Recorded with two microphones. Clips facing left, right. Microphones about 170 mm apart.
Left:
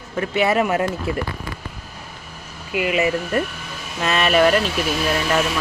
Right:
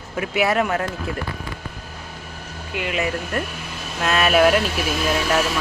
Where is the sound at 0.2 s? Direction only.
5° right (ahead or behind).